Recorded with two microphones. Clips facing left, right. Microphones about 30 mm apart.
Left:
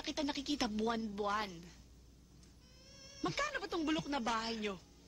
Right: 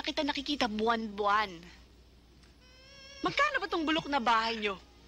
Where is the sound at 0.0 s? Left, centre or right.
Right.